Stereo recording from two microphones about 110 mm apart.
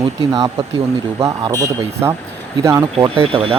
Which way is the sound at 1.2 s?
30° right (ahead or behind).